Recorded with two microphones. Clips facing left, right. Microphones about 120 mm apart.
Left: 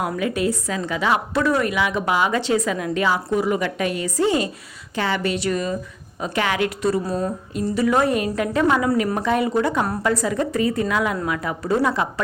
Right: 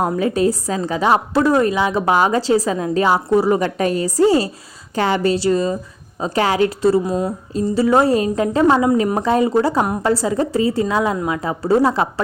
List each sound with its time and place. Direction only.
0.0 s a woman's voice: 35° right (ahead or behind)
7.0 s a sound: 15° right (ahead or behind)
7.7 s a woman's voice: 30° right (ahead or behind)